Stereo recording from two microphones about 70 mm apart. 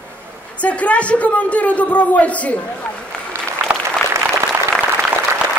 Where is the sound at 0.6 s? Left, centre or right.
Centre.